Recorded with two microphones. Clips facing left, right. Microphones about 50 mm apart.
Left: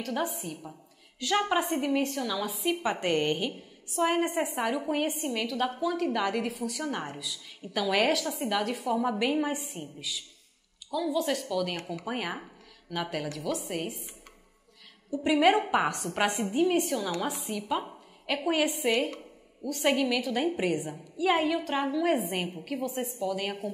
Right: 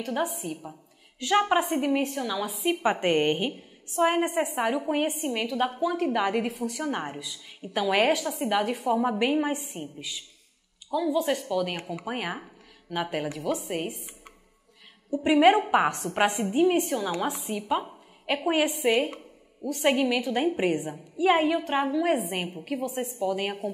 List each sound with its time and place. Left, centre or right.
0.0 s a woman's voice: centre
1.2 s a woman's voice: centre
6.8 s a woman's voice: centre
8.1 s a woman's voice: centre
15.1 s a woman's voice: centre
17.3 s a woman's voice: centre
17.6 s a woman's voice: centre
18.9 s a sound: centre
19.8 s a woman's voice: centre
23.2 s a woman's voice: centre